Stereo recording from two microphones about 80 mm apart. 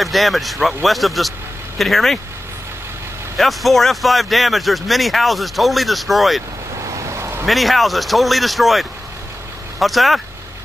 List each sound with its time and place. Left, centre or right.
0.0 s speech: centre
3.3 s speech: centre
7.0 s a sound: right
7.4 s speech: centre